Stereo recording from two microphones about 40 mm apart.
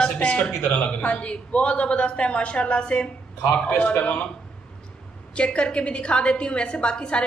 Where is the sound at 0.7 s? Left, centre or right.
Left.